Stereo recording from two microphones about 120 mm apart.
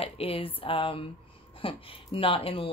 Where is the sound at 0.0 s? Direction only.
50° left (ahead or behind).